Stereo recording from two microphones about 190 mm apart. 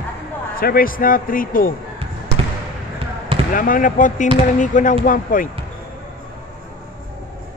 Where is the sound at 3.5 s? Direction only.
45° left (ahead or behind).